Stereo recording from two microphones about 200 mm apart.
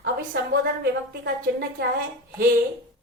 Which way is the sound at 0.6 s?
55° right (ahead or behind).